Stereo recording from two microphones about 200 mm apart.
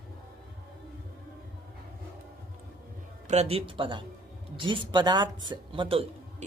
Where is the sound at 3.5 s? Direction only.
25° right (ahead or behind).